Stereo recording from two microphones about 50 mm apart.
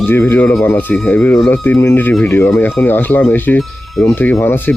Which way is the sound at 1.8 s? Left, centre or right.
Left.